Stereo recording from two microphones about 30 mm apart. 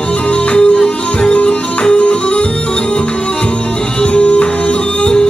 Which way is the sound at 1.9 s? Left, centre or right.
Left.